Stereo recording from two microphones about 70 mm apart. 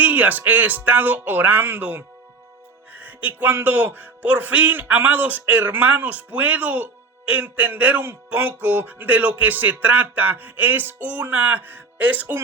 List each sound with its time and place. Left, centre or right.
0.0 s speech: right